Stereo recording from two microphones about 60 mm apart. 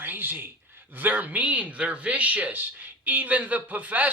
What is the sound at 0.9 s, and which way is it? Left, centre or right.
Speech, right.